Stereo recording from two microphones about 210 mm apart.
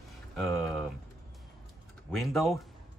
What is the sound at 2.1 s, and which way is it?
Speech, centre (ahead or behind).